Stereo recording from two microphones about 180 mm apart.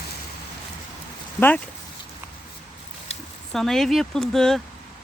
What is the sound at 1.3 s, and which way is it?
Speech, 10° left (ahead or behind).